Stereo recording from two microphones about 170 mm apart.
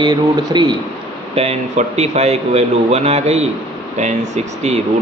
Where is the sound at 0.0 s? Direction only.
25° right (ahead or behind).